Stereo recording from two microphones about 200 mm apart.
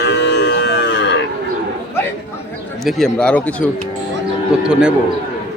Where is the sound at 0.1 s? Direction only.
60° left (ahead or behind).